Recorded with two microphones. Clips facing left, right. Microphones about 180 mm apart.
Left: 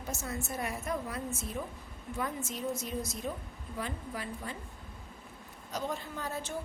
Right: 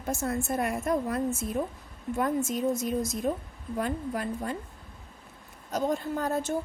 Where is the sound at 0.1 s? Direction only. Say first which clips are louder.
Right 9 dB; 55° right (ahead or behind).